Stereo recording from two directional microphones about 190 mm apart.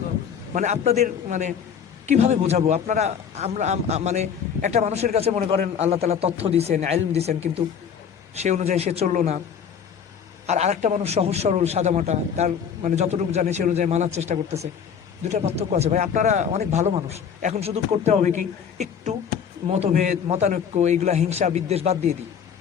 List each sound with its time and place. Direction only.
0.5 s a man's voice: 40° right (ahead or behind)
10.4 s a man's voice: 35° right (ahead or behind)